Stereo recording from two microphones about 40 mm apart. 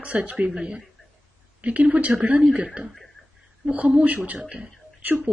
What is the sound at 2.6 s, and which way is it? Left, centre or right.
Speech, right.